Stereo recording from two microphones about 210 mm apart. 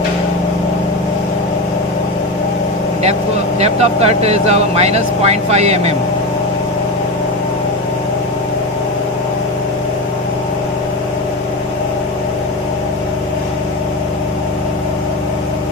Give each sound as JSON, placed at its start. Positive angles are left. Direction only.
{"t": 3.6, "sound": "speech", "side_deg": -30}